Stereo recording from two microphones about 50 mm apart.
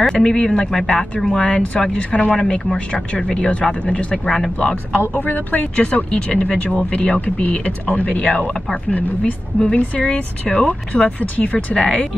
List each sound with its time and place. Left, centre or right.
0.1 s speech: centre
1.5 s speech: left
5.1 s speech: left
9.2 s speech: centre